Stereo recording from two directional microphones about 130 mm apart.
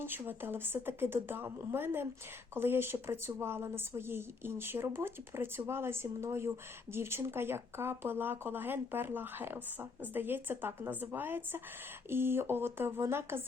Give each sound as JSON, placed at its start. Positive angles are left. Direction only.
{"t": 0.0, "sound": "speech", "side_deg": -15}